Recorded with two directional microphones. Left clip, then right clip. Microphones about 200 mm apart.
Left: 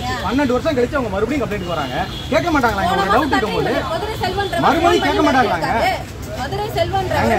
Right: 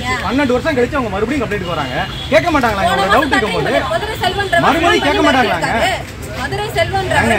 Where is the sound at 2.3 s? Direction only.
40° right (ahead or behind).